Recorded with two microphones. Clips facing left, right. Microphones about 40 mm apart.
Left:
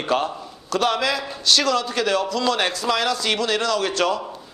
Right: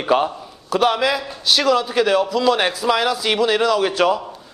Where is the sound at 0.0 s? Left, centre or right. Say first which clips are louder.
Right 4 dB; centre.